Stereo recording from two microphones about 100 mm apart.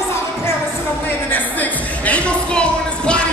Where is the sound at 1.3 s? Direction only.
15° left (ahead or behind).